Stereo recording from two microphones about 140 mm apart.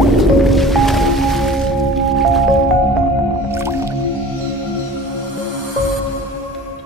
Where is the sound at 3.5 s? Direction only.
20° right (ahead or behind).